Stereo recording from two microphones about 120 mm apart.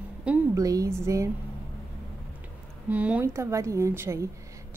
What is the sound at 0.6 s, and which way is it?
Speech, 30° right (ahead or behind).